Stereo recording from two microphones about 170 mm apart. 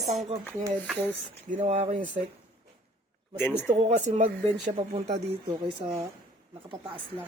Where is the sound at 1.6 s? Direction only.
40° right (ahead or behind).